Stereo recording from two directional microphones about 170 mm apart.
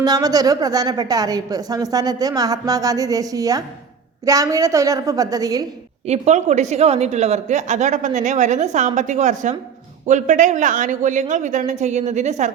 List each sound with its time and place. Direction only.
0.0 s a woman's voice: 20° right (ahead or behind)
6.1 s a woman's voice: 40° right (ahead or behind)